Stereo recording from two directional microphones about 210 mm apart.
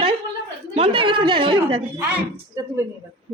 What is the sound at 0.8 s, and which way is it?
A woman's voice, 25° right (ahead or behind).